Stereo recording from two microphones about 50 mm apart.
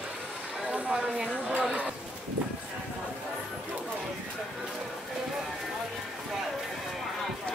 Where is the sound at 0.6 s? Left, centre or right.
Right.